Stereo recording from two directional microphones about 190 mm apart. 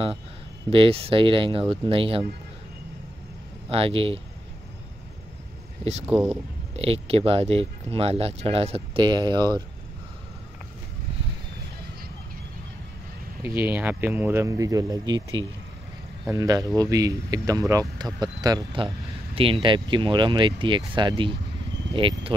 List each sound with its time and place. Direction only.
0.7 s speech: 30° right (ahead or behind)
3.7 s speech: 30° right (ahead or behind)
6.8 s speech: 30° right (ahead or behind)
13.7 s speech: 10° right (ahead or behind); by 21.4 s 25° right (ahead or behind)
21.8 s a sound: 70° right (ahead or behind)